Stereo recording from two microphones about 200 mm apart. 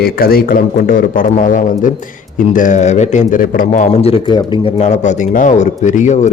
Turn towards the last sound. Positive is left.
turn(degrees=35)  # may be behind; listen again after turning